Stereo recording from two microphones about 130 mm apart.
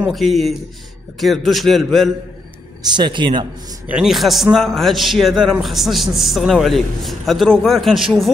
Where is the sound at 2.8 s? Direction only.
35° right (ahead or behind).